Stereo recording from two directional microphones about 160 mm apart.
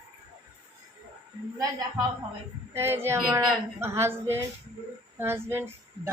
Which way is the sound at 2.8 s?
15° right (ahead or behind).